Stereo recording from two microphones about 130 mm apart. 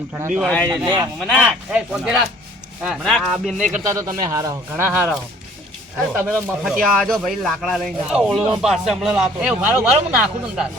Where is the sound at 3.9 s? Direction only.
25° right (ahead or behind).